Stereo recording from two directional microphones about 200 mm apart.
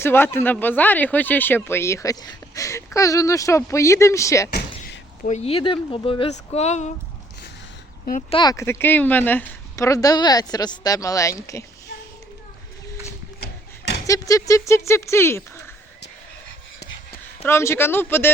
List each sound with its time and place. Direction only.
0.0 s speech: 10° left (ahead or behind)
4.5 s door: 50° left (ahead or behind)
5.3 s speech: 30° left (ahead or behind)
8.3 s speech: 20° left (ahead or behind)
13.4 s a sound: 55° left (ahead or behind)
14.1 s speech: 15° left (ahead or behind)
17.4 s speech: 15° left (ahead or behind)